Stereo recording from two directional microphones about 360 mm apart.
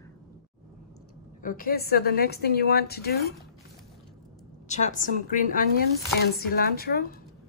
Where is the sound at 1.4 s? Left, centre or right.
Left.